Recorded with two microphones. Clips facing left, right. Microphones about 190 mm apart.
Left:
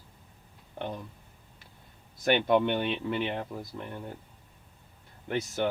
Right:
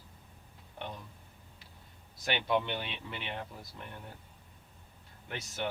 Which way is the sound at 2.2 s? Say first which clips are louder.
Left 8 dB; 50° left (ahead or behind).